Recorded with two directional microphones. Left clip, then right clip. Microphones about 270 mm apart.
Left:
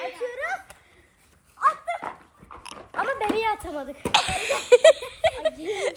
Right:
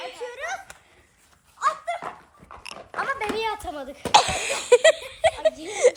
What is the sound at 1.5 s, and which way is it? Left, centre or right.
Dog, centre.